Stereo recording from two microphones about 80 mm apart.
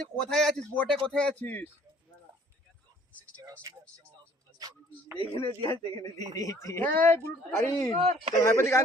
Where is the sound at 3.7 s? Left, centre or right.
Right.